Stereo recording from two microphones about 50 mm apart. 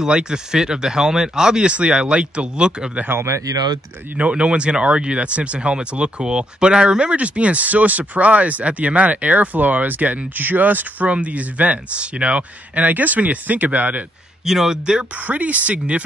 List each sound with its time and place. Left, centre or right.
0.0 s speech: centre
3.2 s speech: right
4.2 s speech: right
14.4 s speech: centre
15.2 s speech: right